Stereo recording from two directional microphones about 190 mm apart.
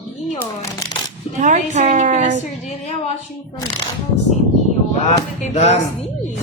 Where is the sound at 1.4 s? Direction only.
40° right (ahead or behind).